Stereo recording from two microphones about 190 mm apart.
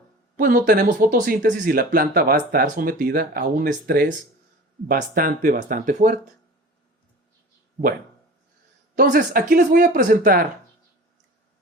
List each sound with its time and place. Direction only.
0.3 s speech: 45° right (ahead or behind)
9.0 s speech: 50° right (ahead or behind)